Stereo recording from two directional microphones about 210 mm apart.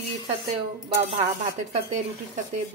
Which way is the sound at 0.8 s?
30° right (ahead or behind).